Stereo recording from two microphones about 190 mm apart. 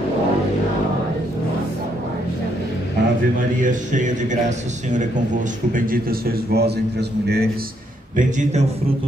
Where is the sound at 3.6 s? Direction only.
40° right (ahead or behind); by 7.6 s 55° right (ahead or behind).